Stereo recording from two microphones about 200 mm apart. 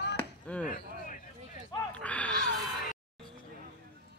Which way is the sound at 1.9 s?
5° left (ahead or behind).